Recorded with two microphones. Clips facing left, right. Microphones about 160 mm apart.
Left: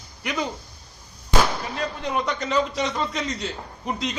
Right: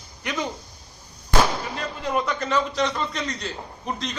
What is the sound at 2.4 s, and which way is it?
Speech, centre (ahead or behind).